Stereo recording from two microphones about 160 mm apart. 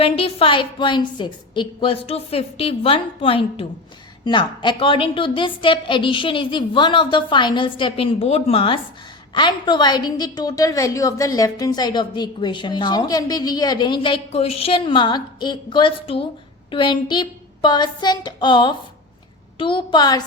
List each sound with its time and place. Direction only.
0.0 s a woman's voice: 35° left (ahead or behind)